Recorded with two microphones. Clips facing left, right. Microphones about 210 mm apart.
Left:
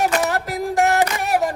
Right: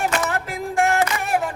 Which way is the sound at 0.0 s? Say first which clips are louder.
Left 3 dB; 40° left (ahead or behind).